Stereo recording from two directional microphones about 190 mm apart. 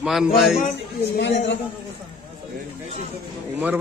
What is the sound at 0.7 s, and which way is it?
Speech, 60° left (ahead or behind).